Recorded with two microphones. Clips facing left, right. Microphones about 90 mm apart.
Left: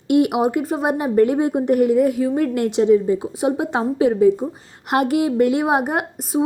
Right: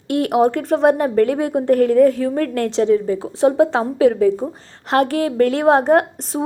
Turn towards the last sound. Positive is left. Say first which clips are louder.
# right 4 dB
turn(degrees=10)  # may be behind; listen again after turning